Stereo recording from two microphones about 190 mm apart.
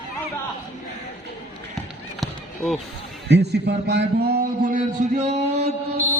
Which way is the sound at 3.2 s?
65° right (ahead or behind).